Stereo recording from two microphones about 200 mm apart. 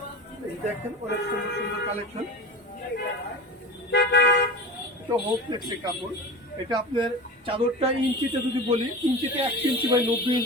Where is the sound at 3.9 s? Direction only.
60° left (ahead or behind).